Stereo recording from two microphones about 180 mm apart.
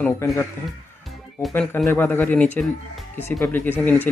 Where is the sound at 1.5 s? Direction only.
10° left (ahead or behind).